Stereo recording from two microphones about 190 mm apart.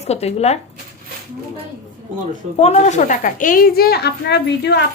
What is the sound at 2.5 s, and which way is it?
A woman's voice, 35° left (ahead or behind).